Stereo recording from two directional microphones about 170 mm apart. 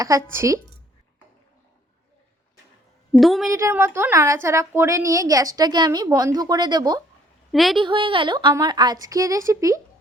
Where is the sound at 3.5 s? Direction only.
15° right (ahead or behind).